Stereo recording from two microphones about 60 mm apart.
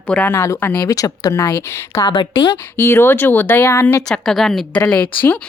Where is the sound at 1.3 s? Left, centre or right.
Left.